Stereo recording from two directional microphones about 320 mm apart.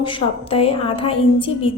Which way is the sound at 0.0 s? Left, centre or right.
Centre.